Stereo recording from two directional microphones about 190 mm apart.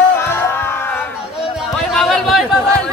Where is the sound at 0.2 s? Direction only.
10° left (ahead or behind).